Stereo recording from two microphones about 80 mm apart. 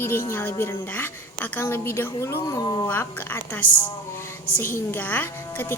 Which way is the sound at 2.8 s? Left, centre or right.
Left.